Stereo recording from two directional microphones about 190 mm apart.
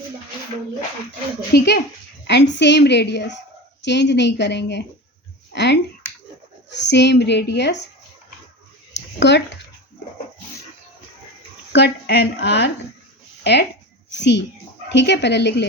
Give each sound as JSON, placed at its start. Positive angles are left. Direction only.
{"t": 1.5, "sound": "a woman's voice", "side_deg": 60}
{"t": 8.9, "sound": "a sound", "side_deg": 65}
{"t": 11.7, "sound": "a woman's voice", "side_deg": 65}